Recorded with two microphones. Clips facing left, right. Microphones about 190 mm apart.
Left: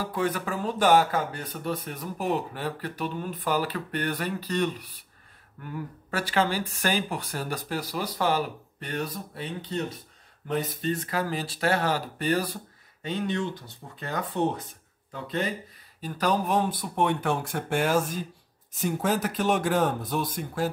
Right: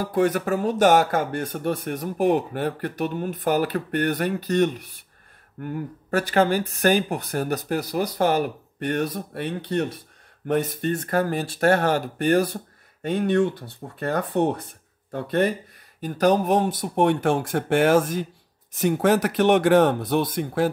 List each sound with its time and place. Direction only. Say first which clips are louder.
0.1 s speech: right 7 dB; 45° right (ahead or behind)
1.4 s speech: right 7 dB; 75° right (ahead or behind)
1.9 s speech: right 11 dB; 50° right (ahead or behind); by 9.8 s 70° right (ahead or behind)
10.4 s speech: right 5 dB; 55° right (ahead or behind)
16.1 s speech: right 6 dB; 45° right (ahead or behind)
18.8 s speech: right 7 dB; 70° right (ahead or behind)